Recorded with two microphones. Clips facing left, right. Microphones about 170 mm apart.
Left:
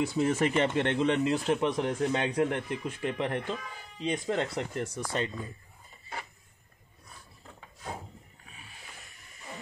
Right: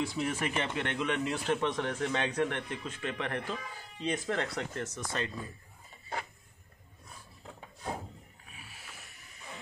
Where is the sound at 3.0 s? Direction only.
25° left (ahead or behind).